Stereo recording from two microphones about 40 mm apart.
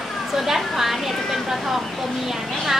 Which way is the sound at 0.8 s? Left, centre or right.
Centre.